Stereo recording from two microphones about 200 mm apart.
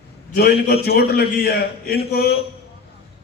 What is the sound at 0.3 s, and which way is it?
A man's voice, 50° left (ahead or behind).